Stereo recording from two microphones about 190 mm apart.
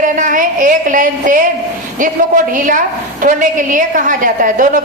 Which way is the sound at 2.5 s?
45° right (ahead or behind).